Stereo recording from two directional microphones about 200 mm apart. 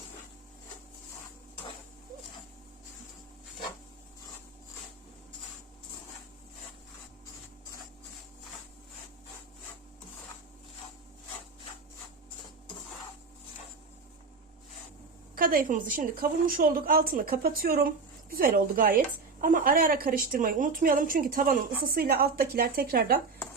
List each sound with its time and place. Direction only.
15.4 s a woman's voice: 45° right (ahead or behind)